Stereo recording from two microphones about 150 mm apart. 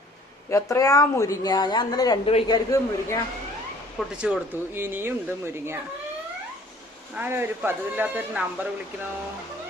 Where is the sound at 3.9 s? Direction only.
5° right (ahead or behind).